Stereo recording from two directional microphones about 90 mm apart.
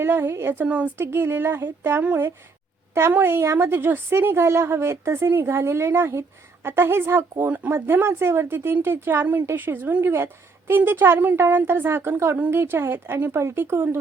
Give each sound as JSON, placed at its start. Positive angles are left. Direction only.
{"t": 0.0, "sound": "a woman's voice", "side_deg": -25}